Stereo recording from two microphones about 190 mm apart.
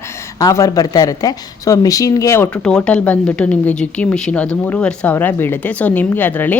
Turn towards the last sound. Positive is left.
turn(degrees=10)  # may be behind; listen again after turning